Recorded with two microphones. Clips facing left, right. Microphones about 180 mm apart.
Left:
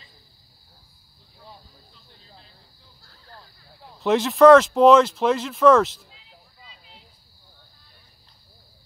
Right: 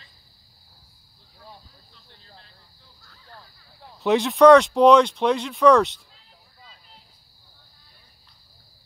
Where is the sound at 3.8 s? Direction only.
Centre (ahead or behind).